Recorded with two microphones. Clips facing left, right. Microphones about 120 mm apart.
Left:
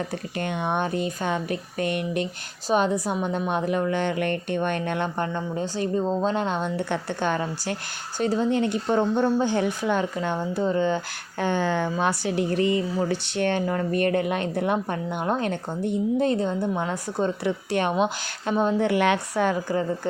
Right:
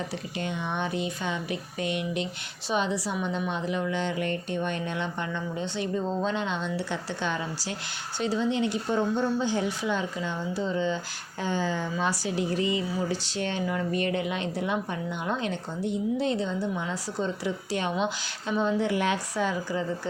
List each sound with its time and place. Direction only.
0.1 s speech: 55° left (ahead or behind)